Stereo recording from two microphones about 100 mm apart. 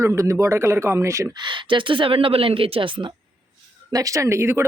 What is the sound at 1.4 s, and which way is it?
A woman's voice, 50° right (ahead or behind).